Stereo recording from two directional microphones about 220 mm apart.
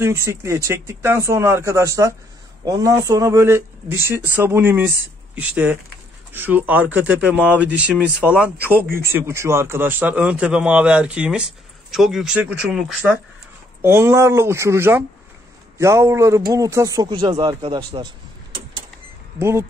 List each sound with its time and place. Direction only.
0.0 s speech: 10° right (ahead or behind)
13.8 s speech: 10° right (ahead or behind)